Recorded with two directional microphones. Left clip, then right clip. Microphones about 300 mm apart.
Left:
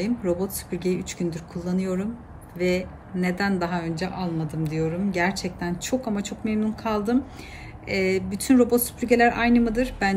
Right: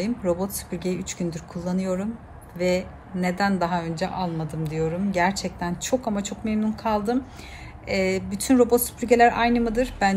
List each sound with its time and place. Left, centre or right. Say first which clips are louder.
0.0 s speech: right 1 dB; centre